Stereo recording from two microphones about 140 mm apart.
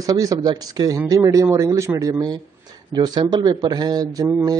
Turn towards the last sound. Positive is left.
turn(degrees=-30)  # may be behind; listen again after turning